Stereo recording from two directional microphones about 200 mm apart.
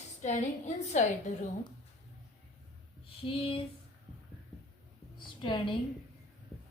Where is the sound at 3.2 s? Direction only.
25° left (ahead or behind).